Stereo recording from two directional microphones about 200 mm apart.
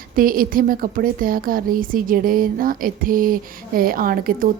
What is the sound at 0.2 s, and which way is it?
A woman's voice, 45° right (ahead or behind).